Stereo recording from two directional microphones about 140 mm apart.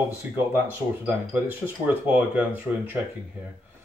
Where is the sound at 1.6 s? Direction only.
15° right (ahead or behind).